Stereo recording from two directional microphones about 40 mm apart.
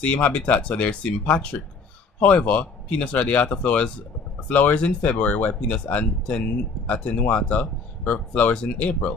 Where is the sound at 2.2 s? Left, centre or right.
Left.